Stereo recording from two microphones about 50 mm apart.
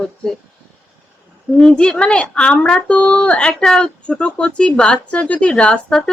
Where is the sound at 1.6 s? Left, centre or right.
Centre.